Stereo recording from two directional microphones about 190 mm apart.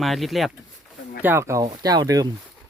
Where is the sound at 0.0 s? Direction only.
Centre (ahead or behind).